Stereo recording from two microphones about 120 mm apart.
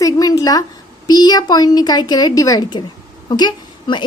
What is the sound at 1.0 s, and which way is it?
A woman's voice, 35° left (ahead or behind).